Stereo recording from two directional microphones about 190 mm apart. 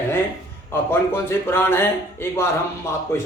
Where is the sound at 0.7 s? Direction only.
10° left (ahead or behind).